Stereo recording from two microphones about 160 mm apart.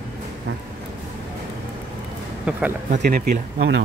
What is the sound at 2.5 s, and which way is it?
Speech, 10° right (ahead or behind).